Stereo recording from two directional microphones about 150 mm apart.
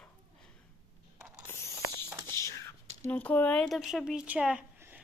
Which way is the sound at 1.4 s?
15° left (ahead or behind).